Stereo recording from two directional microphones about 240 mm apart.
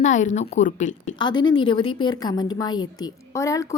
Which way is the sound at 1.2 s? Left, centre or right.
Centre.